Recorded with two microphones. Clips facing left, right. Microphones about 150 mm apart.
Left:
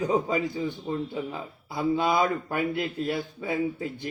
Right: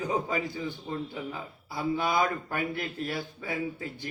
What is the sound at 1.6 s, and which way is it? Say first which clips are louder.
Speech: left 4 dB; 25° left (ahead or behind).